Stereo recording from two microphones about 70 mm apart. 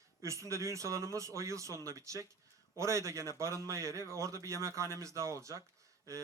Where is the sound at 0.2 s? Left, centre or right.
Right.